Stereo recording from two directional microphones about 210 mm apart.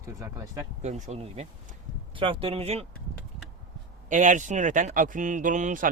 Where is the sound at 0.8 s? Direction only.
30° right (ahead or behind).